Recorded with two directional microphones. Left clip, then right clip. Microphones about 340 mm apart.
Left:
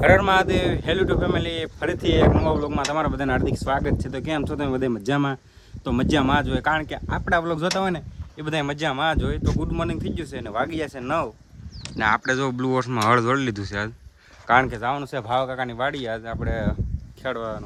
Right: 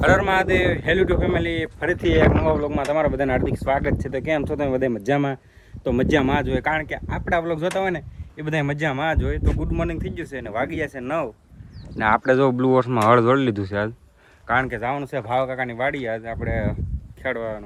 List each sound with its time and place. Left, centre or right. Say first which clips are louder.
0.2 s speech: even; centre
14.4 s speech: left 2 dB; centre